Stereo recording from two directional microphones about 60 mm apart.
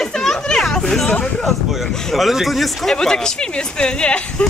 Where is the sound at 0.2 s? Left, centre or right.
Centre.